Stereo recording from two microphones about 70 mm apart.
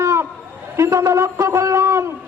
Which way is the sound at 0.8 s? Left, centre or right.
Right.